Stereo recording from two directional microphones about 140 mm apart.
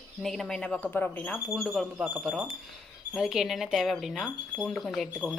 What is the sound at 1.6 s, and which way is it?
Speech, 5° right (ahead or behind).